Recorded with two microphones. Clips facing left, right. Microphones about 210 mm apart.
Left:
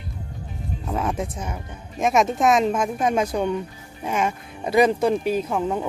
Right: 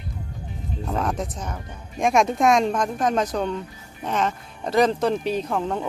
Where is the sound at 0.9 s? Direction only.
5° left (ahead or behind).